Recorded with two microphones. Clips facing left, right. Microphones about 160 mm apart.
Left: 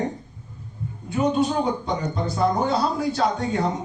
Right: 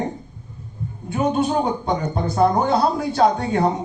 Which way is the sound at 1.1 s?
55° right (ahead or behind).